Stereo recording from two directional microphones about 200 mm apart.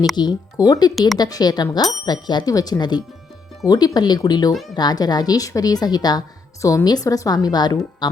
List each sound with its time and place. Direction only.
0.2 s a woman's voice: 20° left (ahead or behind)